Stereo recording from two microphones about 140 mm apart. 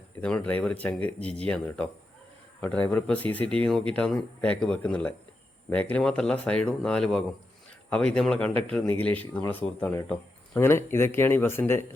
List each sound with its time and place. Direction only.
0.2 s speech: 10° left (ahead or behind)